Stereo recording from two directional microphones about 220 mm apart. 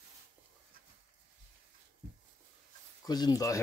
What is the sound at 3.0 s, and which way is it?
Speech, 20° left (ahead or behind).